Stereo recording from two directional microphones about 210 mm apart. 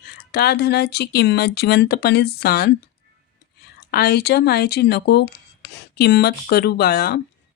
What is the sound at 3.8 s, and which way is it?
Speech, 50° left (ahead or behind).